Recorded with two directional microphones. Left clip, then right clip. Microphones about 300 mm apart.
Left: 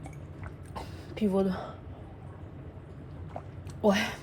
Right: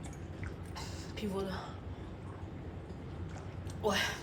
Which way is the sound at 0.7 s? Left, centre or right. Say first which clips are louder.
Left 5 dB; centre.